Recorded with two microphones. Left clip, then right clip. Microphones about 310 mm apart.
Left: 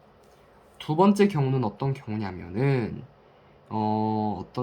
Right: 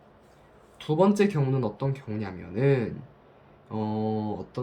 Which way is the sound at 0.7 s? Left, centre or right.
Centre.